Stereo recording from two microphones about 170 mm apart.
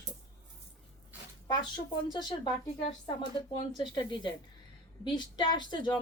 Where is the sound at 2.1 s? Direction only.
25° left (ahead or behind).